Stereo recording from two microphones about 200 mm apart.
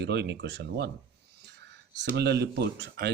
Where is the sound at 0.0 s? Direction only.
55° right (ahead or behind).